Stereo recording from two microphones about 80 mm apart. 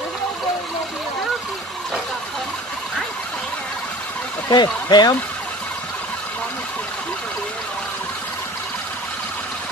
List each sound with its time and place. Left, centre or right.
4.5 s speech: left